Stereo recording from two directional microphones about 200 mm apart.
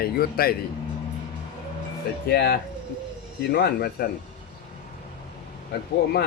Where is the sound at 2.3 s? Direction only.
55° left (ahead or behind).